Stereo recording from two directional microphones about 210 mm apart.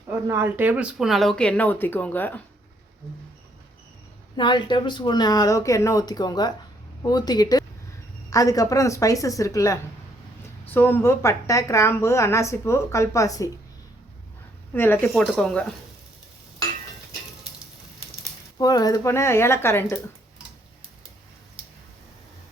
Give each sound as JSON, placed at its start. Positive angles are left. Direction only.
{"t": 0.3, "sound": "speech", "side_deg": -10}
{"t": 4.4, "sound": "a woman's voice", "side_deg": 20}
{"t": 14.7, "sound": "a woman's voice", "side_deg": 10}
{"t": 18.5, "sound": "a woman's voice", "side_deg": 20}